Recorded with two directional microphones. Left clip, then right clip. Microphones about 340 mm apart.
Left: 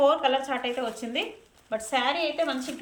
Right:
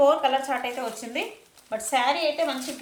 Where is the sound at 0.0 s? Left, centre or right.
Centre.